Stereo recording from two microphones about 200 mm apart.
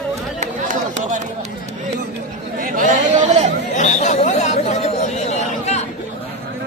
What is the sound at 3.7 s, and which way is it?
Chatter, 35° left (ahead or behind).